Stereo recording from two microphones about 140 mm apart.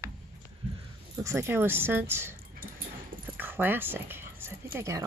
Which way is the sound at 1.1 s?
20° right (ahead or behind).